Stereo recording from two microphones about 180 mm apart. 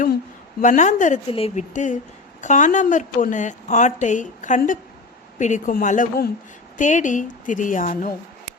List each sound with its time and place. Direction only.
0.6 s speech: 45° left (ahead or behind)
1.3 s speech: 30° left (ahead or behind)